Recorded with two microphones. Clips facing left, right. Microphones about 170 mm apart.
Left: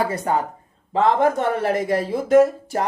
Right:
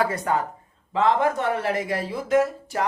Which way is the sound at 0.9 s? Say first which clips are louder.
Left 3 dB; 45° left (ahead or behind).